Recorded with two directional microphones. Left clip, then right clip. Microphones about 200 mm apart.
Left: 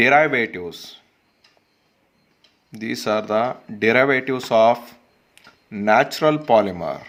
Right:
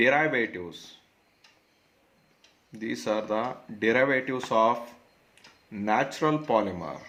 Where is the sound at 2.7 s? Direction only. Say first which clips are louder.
Left 7 dB; 45° left (ahead or behind).